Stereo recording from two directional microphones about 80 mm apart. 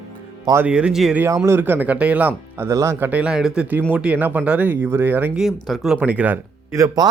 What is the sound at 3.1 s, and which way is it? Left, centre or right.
Speech, centre.